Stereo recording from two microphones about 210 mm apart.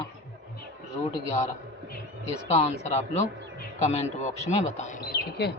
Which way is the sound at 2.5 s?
30° left (ahead or behind).